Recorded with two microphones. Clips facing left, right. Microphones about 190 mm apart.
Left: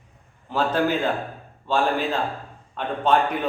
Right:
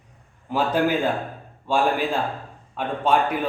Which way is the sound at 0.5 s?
10° right (ahead or behind).